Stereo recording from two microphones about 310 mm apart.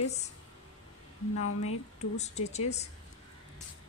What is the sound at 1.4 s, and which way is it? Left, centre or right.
Speech, left.